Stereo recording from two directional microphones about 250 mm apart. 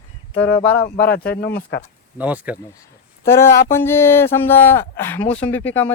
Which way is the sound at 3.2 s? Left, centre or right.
Centre.